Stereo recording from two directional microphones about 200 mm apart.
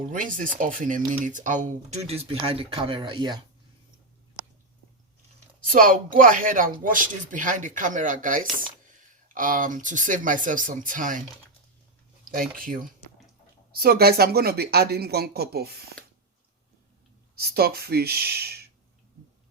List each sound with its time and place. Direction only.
0.1 s speech: 40° right (ahead or behind); by 3.4 s 25° right (ahead or behind)
5.7 s speech: 45° right (ahead or behind)
12.2 s speech: 45° right (ahead or behind)
17.3 s speech: 50° right (ahead or behind)